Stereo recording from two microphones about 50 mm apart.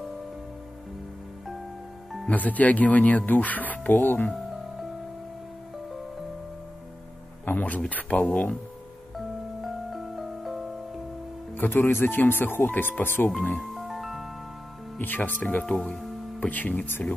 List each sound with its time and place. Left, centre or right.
2.2 s speech: left
7.4 s speech: left
9.1 s music: centre
11.5 s speech: left
13.6 s music: centre
15.0 s speech: left